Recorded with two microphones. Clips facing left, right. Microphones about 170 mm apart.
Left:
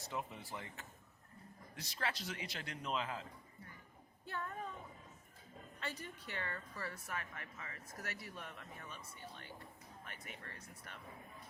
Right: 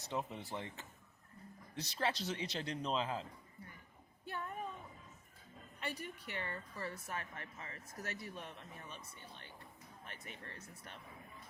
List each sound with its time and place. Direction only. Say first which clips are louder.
0.1 s a woman's voice: right 4 dB; 20° right (ahead or behind)
1.7 s a woman's voice: right 5 dB; 25° right (ahead or behind)
4.3 s a sound: even; 15° right (ahead or behind)
5.8 s a woman's voice: right 3 dB; 15° right (ahead or behind)
10.1 s a woman's voice: right 2 dB; 25° right (ahead or behind)